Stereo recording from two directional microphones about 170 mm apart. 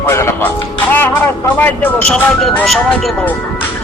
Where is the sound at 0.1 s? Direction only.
15° left (ahead or behind).